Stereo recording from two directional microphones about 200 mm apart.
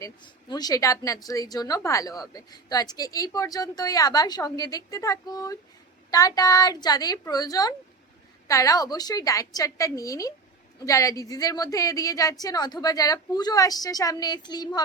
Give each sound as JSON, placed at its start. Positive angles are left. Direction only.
{"t": 0.0, "sound": "a woman's voice", "side_deg": 20}